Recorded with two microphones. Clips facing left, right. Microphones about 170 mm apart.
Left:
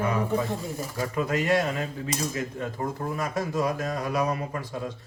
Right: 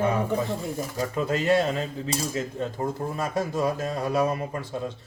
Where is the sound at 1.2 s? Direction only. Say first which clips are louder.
Right 2 dB; 30° right (ahead or behind).